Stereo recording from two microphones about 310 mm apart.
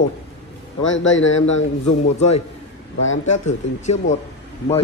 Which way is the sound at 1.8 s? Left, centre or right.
Left.